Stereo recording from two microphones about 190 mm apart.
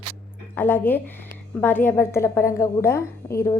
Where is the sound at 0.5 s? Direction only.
10° left (ahead or behind).